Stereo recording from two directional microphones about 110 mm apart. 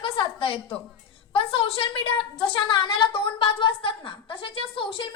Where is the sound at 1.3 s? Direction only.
60° left (ahead or behind).